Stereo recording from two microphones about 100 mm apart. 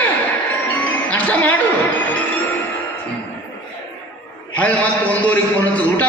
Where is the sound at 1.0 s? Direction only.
15° left (ahead or behind).